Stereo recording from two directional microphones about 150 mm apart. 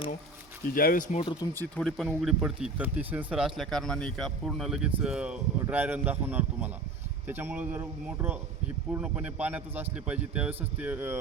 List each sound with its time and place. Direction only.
0.7 s speech: 75° left (ahead or behind)
1.2 s speech: 30° left (ahead or behind)
1.5 s speech: 5° left (ahead or behind); by 11.2 s 15° right (ahead or behind)